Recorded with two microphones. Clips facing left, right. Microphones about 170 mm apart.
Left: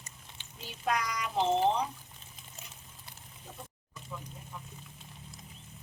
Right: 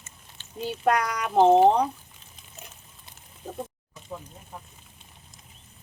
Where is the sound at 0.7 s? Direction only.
60° right (ahead or behind).